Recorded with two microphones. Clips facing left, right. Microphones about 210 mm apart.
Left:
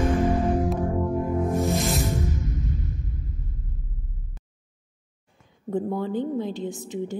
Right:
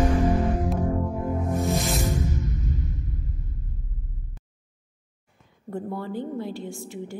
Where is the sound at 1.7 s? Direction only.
Centre (ahead or behind).